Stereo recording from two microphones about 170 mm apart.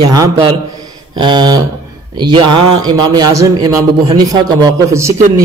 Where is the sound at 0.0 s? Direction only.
20° right (ahead or behind).